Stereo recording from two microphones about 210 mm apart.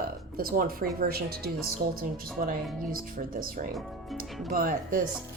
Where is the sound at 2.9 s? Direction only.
45° right (ahead or behind).